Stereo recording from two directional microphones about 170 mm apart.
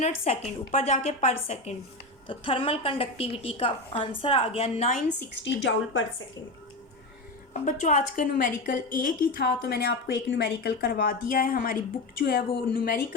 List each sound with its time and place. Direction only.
0.0 s a woman's voice: 40° left (ahead or behind)
5.4 s a woman's voice: 90° left
7.5 s a woman's voice: 50° left (ahead or behind)